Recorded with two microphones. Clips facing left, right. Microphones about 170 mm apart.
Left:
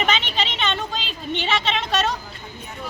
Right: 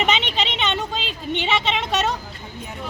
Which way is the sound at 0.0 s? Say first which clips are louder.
Right 1 dB; 20° right (ahead or behind).